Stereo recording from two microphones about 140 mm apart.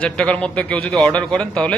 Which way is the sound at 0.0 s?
10° left (ahead or behind).